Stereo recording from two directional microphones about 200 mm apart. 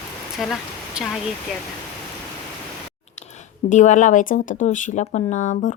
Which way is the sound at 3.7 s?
40° left (ahead or behind).